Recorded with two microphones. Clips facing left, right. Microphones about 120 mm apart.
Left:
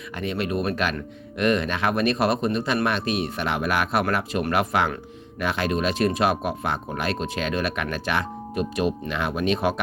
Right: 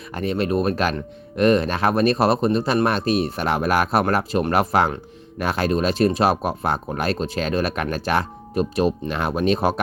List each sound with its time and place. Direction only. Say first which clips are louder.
0.2 s speech: right 5 dB; 35° right (ahead or behind)